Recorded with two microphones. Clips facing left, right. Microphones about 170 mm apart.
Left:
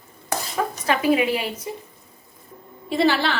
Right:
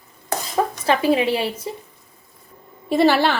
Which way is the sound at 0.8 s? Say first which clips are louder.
Right 1 dB; 30° right (ahead or behind).